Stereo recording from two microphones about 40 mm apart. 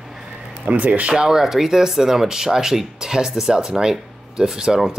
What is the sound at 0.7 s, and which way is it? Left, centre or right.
Speech, right.